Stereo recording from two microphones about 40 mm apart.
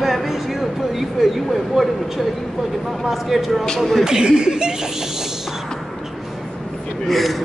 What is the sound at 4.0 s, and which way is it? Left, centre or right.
Speech, centre.